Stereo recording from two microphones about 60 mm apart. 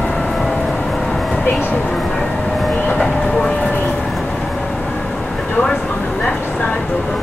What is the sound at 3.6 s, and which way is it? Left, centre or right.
Vehicle, left.